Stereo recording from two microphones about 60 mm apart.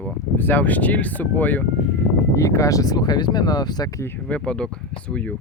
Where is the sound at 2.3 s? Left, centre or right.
Left.